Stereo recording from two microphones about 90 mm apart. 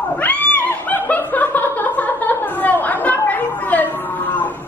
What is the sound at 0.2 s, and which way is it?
Laughter, 20° left (ahead or behind).